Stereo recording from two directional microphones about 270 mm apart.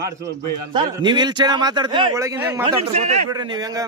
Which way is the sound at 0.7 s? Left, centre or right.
Centre.